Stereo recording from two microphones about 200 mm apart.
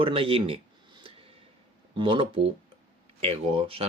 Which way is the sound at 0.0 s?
25° right (ahead or behind).